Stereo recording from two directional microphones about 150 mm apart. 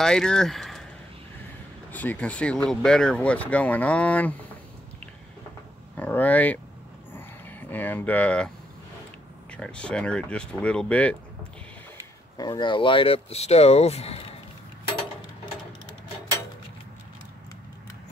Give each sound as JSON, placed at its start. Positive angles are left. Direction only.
{"t": 0.0, "sound": "speech", "side_deg": 5}
{"t": 1.9, "sound": "speech", "side_deg": 10}
{"t": 5.9, "sound": "speech", "side_deg": 10}
{"t": 7.2, "sound": "a sound", "side_deg": 15}
{"t": 9.5, "sound": "speech", "side_deg": 5}
{"t": 12.4, "sound": "speech", "side_deg": 30}